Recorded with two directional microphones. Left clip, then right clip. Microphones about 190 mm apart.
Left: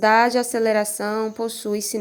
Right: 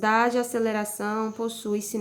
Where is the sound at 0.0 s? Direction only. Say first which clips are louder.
Left 6 dB; 30° left (ahead or behind).